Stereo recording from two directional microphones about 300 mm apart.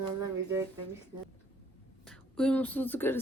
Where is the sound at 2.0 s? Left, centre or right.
Centre.